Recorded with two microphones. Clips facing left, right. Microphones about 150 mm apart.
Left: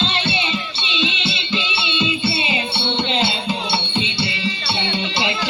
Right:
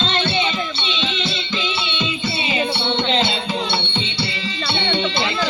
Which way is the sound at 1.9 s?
10° left (ahead or behind).